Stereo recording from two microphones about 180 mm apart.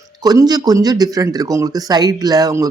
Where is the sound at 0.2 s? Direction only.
20° right (ahead or behind).